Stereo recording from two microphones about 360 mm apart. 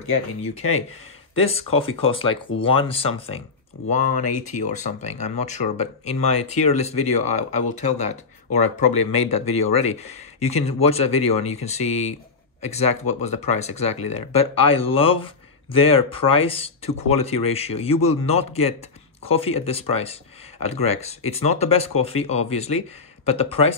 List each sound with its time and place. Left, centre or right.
0.6 s speech: left
1.4 s speech: centre
4.7 s speech: centre
8.5 s speech: left
9.0 s speech: centre
9.6 s speech: left
10.4 s speech: centre